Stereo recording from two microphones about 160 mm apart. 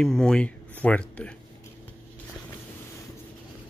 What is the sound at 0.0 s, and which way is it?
Speech, 5° left (ahead or behind).